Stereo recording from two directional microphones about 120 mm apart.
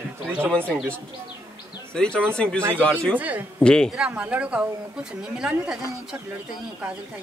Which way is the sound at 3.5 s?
5° left (ahead or behind).